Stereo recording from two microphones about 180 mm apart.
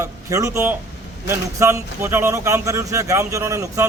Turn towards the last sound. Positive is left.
turn(degrees=-15)  # may be behind; listen again after turning